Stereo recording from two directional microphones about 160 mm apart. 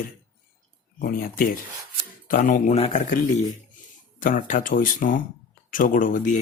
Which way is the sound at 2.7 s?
45° left (ahead or behind).